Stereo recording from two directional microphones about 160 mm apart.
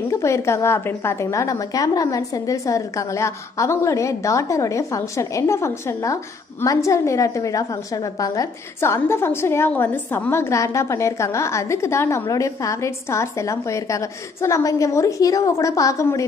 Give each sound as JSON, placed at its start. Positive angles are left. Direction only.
{"t": 0.1, "sound": "a woman's voice", "side_deg": 15}